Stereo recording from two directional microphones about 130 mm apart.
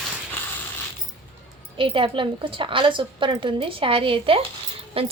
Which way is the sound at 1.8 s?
40° right (ahead or behind).